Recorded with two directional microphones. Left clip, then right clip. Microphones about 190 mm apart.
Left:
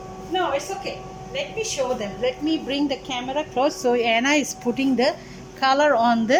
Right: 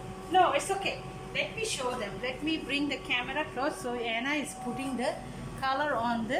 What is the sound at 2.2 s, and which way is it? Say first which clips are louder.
A woman's voice: left 11 dB; 40° left (ahead or behind).